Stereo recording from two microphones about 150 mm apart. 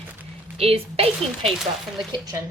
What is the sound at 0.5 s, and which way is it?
Speech, 40° right (ahead or behind).